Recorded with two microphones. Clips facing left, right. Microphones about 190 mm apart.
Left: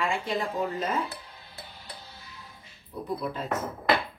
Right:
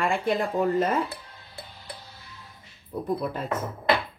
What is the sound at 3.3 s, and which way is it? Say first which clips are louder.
Speech: right 1 dB; 50° right (ahead or behind).